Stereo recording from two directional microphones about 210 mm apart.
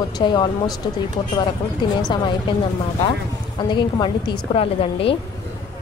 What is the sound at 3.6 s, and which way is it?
A woman's voice, 20° left (ahead or behind).